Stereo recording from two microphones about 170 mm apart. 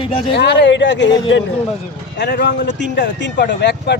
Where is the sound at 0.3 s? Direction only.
85° left.